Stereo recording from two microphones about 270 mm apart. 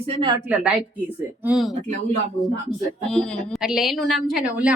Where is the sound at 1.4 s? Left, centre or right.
Centre.